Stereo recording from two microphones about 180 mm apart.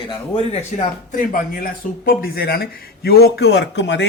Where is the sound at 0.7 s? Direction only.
40° left (ahead or behind).